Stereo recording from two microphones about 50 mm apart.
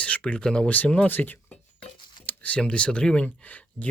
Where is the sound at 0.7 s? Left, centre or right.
Left.